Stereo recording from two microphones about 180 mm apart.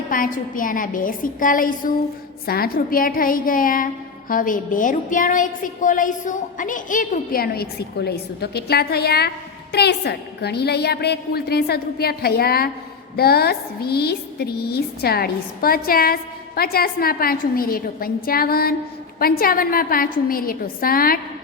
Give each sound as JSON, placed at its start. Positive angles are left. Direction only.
{"t": 0.1, "sound": "a woman's voice", "side_deg": 50}